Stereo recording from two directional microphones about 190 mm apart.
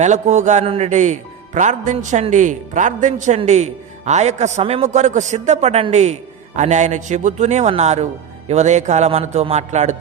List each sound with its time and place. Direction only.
0.0 s speech: 40° right (ahead or behind)